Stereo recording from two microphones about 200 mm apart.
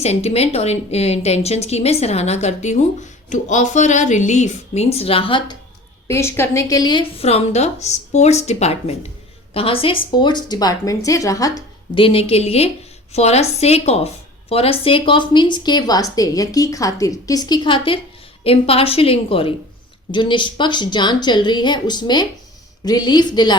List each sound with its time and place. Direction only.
0.0 s a woman's voice: 30° left (ahead or behind)
6.1 s a woman's voice: 15° left (ahead or behind)